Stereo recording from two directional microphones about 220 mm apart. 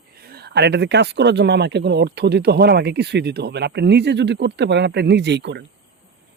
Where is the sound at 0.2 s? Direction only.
45° right (ahead or behind).